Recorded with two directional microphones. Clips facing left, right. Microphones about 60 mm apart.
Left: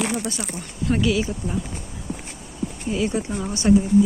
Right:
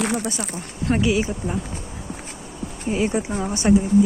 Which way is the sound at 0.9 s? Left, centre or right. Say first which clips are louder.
Right 1 dB; right.